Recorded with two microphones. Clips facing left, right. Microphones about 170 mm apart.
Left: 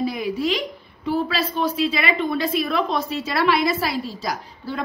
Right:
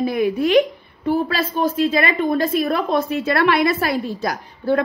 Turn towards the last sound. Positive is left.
turn(degrees=-55)  # may be behind; listen again after turning